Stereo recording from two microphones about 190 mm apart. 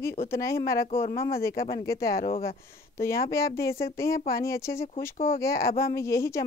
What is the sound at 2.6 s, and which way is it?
Speech, 15° left (ahead or behind).